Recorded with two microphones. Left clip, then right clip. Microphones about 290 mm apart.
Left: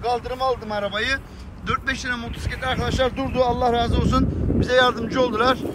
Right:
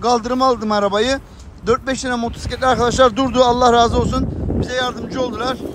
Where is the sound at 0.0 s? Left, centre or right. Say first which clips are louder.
Right 7 dB; right.